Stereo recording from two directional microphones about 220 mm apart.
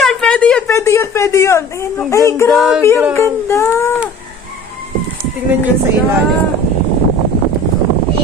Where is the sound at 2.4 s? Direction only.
Centre (ahead or behind).